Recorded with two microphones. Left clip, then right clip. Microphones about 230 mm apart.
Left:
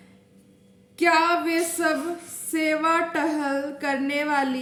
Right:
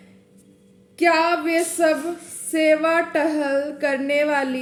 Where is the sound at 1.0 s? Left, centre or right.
Centre.